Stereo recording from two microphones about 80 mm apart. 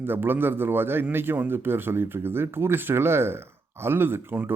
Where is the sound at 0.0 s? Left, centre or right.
Right.